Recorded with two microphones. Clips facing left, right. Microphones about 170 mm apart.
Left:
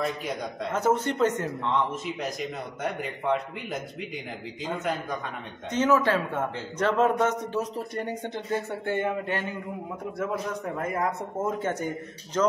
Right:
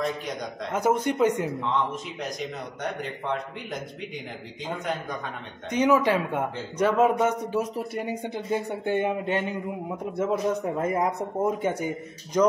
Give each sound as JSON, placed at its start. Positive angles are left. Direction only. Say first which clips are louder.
{"t": 0.7, "sound": "speech", "louder": "right 1 dB", "side_deg": -10}
{"t": 2.2, "sound": "a man's voice", "louder": "left 1 dB", "side_deg": 5}
{"t": 5.7, "sound": "speech", "louder": "right 1 dB", "side_deg": -15}